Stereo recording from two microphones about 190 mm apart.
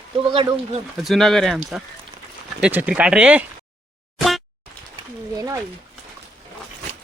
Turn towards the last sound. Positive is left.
turn(degrees=-15)  # may be behind; listen again after turning